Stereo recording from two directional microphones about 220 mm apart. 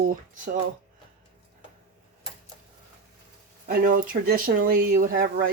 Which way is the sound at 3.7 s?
40° right (ahead or behind).